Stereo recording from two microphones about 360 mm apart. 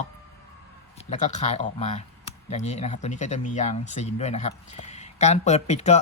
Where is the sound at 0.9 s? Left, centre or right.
Centre.